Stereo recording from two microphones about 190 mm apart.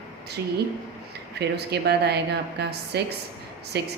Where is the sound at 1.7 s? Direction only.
60° right (ahead or behind).